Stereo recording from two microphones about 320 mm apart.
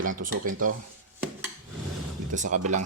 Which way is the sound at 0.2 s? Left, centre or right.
Right.